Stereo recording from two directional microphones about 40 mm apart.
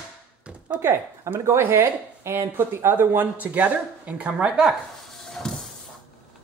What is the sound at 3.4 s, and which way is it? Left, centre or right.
Speech, right.